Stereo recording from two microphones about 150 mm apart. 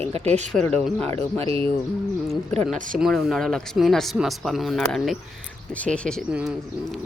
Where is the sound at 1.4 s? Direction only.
35° right (ahead or behind).